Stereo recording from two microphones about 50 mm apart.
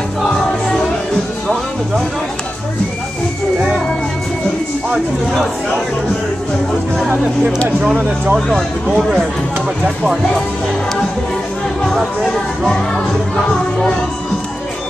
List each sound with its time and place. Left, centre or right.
0.2 s music: centre
7.9 s speech: right
8.5 s speech: centre
12.2 s speech: centre